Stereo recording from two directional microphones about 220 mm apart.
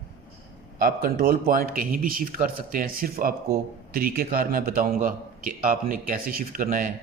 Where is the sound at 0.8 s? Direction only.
40° right (ahead or behind).